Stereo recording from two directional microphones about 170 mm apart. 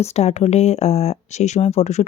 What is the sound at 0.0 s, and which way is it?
A woman's voice, 40° left (ahead or behind).